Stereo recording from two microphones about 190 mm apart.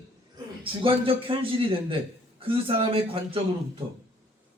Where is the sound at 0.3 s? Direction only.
30° right (ahead or behind).